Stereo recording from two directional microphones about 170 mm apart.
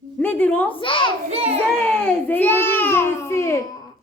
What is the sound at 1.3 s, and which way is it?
Speech, 35° right (ahead or behind).